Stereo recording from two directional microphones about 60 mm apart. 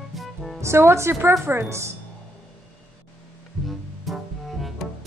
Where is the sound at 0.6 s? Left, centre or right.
Right.